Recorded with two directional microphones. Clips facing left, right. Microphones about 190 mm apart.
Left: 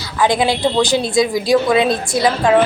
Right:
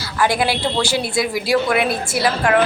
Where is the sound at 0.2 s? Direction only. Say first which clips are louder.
Left 3 dB; 20° left (ahead or behind).